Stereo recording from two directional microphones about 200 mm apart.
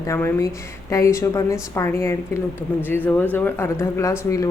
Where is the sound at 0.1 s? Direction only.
10° left (ahead or behind).